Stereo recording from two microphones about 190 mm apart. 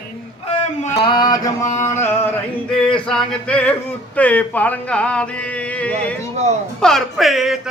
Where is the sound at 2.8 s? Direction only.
5° left (ahead or behind).